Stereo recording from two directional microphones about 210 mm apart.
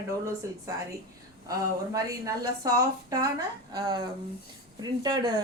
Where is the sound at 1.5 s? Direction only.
15° right (ahead or behind).